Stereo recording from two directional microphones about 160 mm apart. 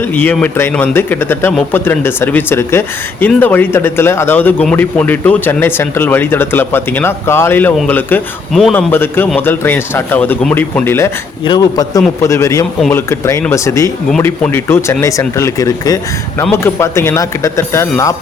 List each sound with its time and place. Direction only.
0.1 s speech: 10° left (ahead or behind)
11.4 s speech: 25° left (ahead or behind)